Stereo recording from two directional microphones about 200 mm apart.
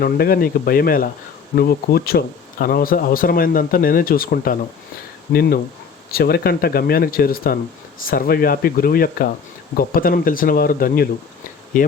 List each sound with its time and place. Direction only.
0.0 s speech: 50° left (ahead or behind)